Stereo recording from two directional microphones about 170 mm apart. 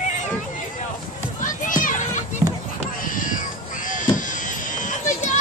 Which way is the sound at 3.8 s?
50° left (ahead or behind).